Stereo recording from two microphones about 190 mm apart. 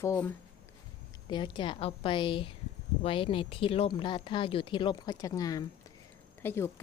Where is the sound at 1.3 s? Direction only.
25° left (ahead or behind).